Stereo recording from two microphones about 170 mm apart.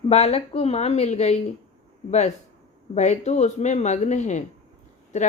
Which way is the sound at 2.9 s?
45° left (ahead or behind).